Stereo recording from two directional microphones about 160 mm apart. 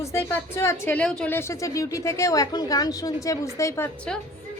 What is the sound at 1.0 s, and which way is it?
A woman's voice, 5° left (ahead or behind).